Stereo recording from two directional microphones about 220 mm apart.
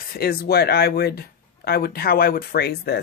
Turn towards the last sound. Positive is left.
turn(degrees=45)  # may be behind; listen again after turning